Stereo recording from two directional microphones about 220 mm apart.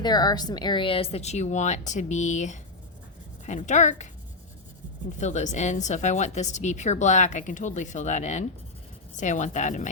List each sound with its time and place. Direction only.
0.0 s a woman's voice: 20° left (ahead or behind)
5.2 s a woman's voice: 35° left (ahead or behind)